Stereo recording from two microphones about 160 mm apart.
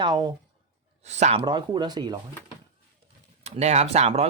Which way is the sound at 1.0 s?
45° right (ahead or behind).